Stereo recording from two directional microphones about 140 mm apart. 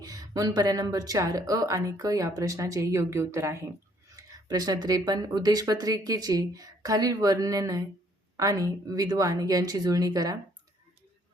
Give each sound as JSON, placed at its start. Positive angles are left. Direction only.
{"t": 0.0, "sound": "speech", "side_deg": -25}